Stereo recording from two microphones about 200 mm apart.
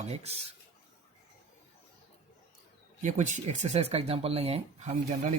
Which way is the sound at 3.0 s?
35° right (ahead or behind).